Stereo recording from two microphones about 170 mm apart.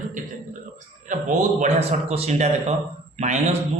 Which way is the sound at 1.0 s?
45° right (ahead or behind).